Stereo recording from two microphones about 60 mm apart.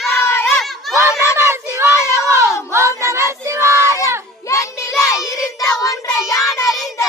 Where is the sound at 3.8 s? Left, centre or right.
Left.